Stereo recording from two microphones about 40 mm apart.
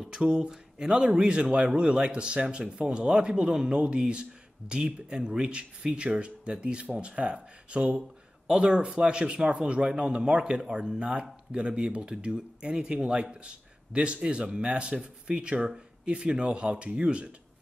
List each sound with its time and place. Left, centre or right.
0.2 s speech: right